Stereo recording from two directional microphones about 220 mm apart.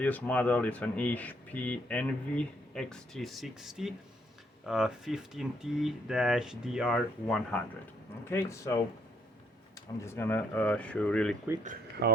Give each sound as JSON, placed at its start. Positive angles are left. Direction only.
{"t": 0.0, "sound": "speech", "side_deg": 5}
{"t": 8.3, "sound": "speech", "side_deg": 15}
{"t": 10.0, "sound": "speech", "side_deg": 10}
{"t": 11.6, "sound": "speech", "side_deg": -40}